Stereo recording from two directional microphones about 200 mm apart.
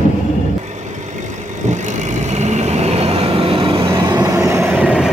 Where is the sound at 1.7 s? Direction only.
35° right (ahead or behind); by 4.7 s 15° right (ahead or behind).